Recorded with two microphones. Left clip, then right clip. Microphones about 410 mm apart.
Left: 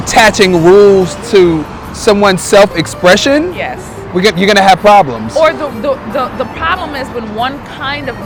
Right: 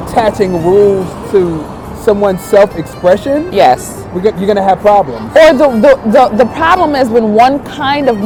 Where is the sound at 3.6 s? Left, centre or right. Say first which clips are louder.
Right 12 dB; right.